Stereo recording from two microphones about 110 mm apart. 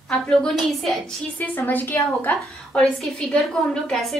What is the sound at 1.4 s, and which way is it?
Speech, 15° left (ahead or behind).